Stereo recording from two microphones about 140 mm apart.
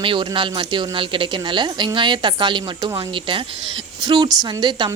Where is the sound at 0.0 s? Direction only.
35° right (ahead or behind).